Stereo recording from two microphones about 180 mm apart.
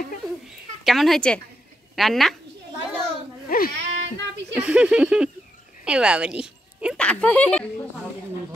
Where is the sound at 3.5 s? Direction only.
55° left (ahead or behind).